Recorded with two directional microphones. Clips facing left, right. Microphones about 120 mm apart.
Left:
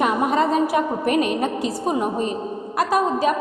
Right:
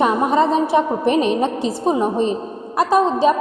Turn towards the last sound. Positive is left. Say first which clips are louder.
# right 4 dB
turn(degrees=-30)  # may be behind; listen again after turning